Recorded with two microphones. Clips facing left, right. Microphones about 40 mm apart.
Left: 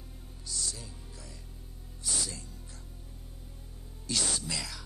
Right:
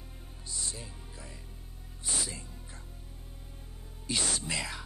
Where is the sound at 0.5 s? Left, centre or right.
Right.